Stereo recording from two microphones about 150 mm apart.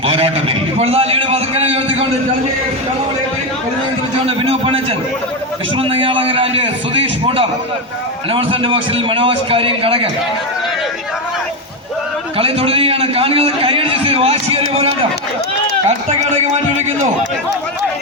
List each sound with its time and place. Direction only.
0.0 s a man's voice: 40° right (ahead or behind)
4.3 s a man's voice: 40° right (ahead or behind)
12.4 s a man's voice: 40° right (ahead or behind)